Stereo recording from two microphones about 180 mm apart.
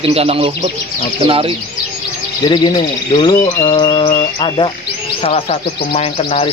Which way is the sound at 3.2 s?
25° left (ahead or behind).